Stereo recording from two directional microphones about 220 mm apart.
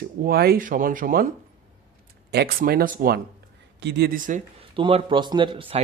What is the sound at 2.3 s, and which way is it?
Speech, 45° right (ahead or behind).